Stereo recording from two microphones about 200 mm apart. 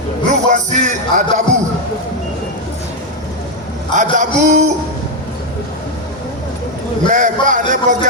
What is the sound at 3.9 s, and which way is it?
Speech, 40° right (ahead or behind).